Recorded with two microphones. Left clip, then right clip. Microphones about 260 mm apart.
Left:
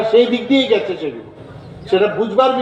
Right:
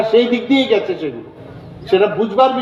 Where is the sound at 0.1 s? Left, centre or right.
Right.